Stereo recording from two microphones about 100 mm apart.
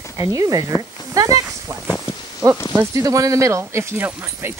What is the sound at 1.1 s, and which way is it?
Snake, 35° right (ahead or behind).